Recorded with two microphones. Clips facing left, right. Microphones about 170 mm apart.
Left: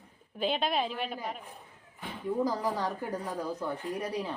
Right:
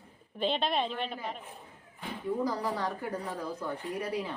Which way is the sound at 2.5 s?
20° left (ahead or behind).